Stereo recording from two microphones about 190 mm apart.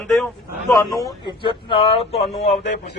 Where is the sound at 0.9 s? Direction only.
20° left (ahead or behind).